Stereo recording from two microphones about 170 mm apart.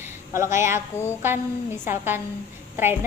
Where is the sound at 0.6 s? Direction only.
15° right (ahead or behind).